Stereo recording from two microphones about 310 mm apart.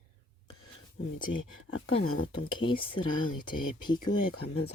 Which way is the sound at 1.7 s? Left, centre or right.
Left.